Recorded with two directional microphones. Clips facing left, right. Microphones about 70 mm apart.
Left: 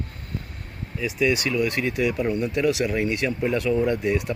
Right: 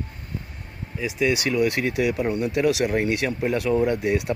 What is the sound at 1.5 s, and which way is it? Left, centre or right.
Speech, right.